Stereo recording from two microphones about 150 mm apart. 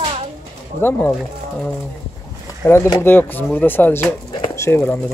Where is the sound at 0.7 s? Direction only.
15° left (ahead or behind).